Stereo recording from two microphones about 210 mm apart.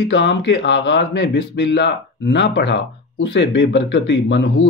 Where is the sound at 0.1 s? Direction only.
60° left (ahead or behind).